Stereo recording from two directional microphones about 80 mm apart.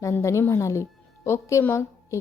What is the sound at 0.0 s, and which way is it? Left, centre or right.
A woman's voice, left.